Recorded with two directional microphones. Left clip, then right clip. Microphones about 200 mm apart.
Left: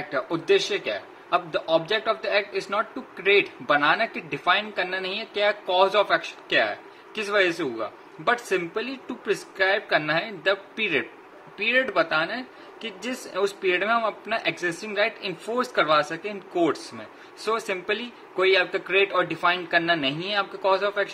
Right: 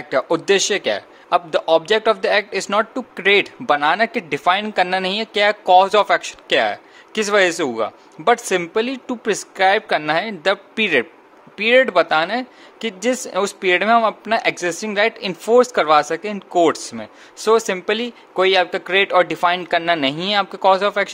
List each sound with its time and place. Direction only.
0.1 s a man's voice: 55° right (ahead or behind)